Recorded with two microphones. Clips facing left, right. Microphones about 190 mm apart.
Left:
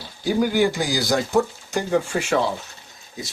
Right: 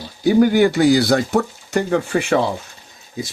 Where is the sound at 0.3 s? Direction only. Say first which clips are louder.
Right 6 dB; 60° right (ahead or behind).